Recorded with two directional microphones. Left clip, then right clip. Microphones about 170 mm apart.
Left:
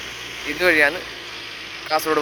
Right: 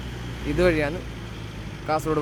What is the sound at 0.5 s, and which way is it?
Speech, centre (ahead or behind).